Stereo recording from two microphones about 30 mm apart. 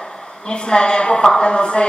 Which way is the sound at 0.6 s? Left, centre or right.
Left.